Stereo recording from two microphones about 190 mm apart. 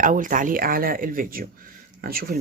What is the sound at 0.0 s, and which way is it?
Speech, 45° right (ahead or behind).